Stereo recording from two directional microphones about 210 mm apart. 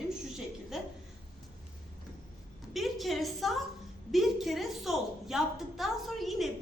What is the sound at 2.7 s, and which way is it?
A woman's voice, centre (ahead or behind).